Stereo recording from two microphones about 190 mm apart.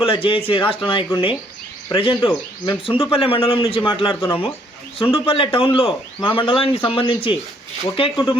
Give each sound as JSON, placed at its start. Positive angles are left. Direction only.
{"t": 0.0, "sound": "a man's voice", "side_deg": 30}